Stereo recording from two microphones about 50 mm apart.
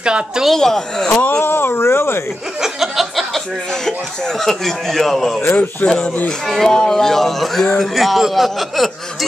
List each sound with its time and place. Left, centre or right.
0.0 s speech: centre
0.5 s speech: centre
1.4 s speech: left
2.6 s chuckle: centre
4.4 s a man's voice: centre
5.8 s speech: left
6.4 s a man's voice: centre